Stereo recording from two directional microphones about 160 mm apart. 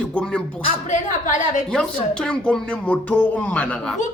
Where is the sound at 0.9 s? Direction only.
50° left (ahead or behind).